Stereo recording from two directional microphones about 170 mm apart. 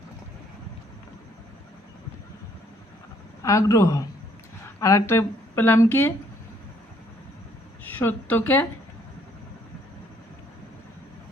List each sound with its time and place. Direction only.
3.4 s a man's voice: 20° left (ahead or behind)
7.9 s a woman's voice: 10° left (ahead or behind)